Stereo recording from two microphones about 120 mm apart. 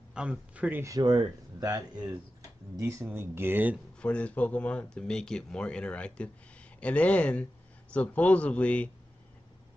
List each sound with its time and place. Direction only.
0.1 s speech: 10° right (ahead or behind)
0.8 s speech: 30° right (ahead or behind)
4.0 s speech: 10° left (ahead or behind)